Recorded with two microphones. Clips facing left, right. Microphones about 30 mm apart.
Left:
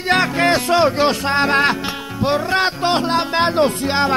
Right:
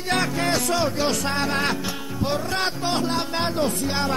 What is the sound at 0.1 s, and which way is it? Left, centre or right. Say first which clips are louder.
Speech: left 7 dB; left.